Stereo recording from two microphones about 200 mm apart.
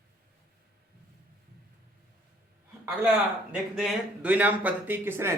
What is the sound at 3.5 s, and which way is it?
Speech, 5° right (ahead or behind).